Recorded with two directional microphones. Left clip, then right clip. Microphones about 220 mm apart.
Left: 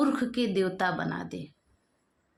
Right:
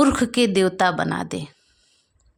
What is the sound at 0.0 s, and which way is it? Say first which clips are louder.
A woman's voice: right 9 dB; 50° right (ahead or behind).